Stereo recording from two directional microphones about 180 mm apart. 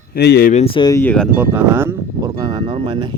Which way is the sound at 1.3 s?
10° right (ahead or behind).